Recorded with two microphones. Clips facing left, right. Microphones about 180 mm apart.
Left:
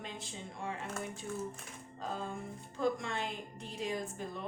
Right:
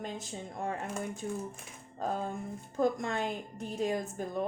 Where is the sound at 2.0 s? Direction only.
45° right (ahead or behind).